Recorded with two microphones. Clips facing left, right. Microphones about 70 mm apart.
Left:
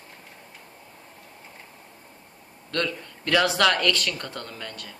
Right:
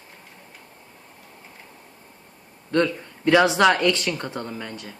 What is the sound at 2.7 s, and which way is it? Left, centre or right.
Speech, centre.